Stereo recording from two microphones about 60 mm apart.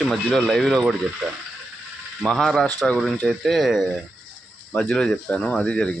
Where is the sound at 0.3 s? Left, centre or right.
Centre.